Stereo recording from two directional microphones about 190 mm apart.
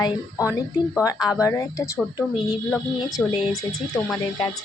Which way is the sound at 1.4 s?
15° left (ahead or behind).